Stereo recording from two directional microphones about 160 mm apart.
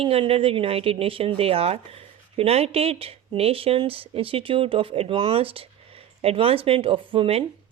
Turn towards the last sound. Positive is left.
turn(degrees=-35)  # may be behind; listen again after turning